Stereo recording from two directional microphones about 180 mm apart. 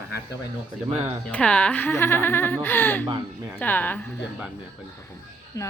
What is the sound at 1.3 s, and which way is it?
Speech, 5° left (ahead or behind).